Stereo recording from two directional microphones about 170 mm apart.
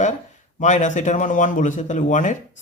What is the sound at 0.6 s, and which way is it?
Speech, 45° left (ahead or behind).